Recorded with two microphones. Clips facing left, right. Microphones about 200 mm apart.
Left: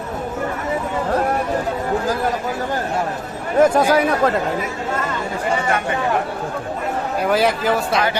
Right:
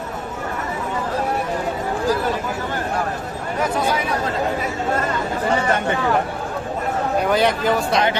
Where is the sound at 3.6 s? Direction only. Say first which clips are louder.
Left 8 dB; 50° left (ahead or behind).